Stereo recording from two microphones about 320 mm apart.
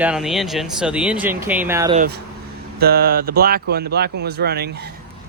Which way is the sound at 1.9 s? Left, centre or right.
Right.